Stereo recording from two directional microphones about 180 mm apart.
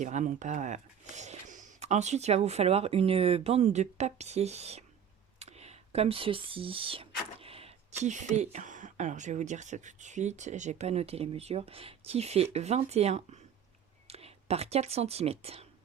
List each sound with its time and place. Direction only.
0.0 s speech: 40° right (ahead or behind)
5.4 s a sound: 35° right (ahead or behind)
8.0 s speech: 40° right (ahead or behind)